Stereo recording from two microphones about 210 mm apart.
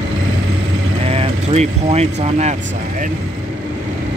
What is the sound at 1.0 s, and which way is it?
Speech, 30° right (ahead or behind).